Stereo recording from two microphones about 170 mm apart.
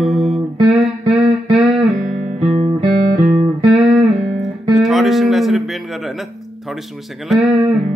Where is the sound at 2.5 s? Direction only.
30° right (ahead or behind).